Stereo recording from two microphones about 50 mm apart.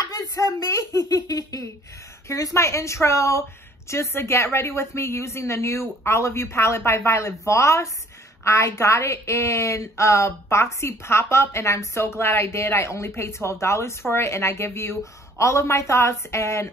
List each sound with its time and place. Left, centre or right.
0.4 s a sound: left
2.2 s a woman's voice: left
3.9 s a woman's voice: left
7.1 s a woman's voice: left
15.3 s a woman's voice: left